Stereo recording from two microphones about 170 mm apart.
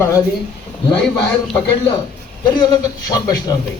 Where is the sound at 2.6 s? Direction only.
20° left (ahead or behind).